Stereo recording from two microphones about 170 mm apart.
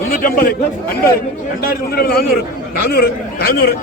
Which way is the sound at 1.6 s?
60° left (ahead or behind).